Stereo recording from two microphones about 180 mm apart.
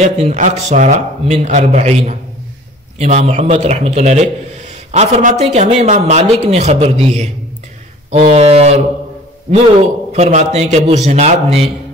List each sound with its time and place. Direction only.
0.0 s speech: 40° right (ahead or behind)
10.1 s speech: 35° right (ahead or behind)